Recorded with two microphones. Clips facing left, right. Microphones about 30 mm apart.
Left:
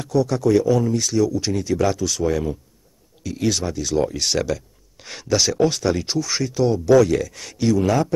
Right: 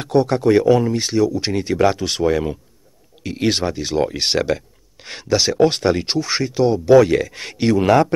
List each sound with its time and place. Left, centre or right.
0.0 s speech: right